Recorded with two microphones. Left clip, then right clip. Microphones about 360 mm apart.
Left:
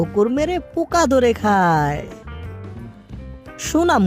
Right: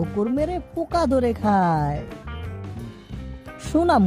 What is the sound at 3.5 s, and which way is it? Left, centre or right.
Speech, centre.